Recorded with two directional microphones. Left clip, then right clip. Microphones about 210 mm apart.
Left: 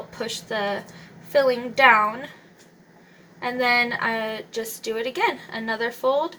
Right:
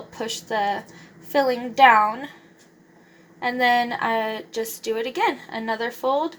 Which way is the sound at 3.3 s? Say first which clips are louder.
Right 1 dB; 35° right (ahead or behind).